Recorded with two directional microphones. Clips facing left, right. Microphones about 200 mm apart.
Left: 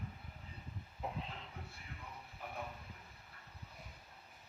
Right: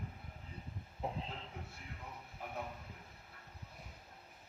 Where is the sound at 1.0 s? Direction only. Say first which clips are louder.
Right 2 dB; 30° right (ahead or behind).